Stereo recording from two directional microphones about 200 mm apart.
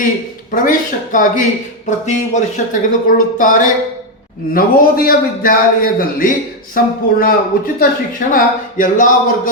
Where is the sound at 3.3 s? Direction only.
40° left (ahead or behind).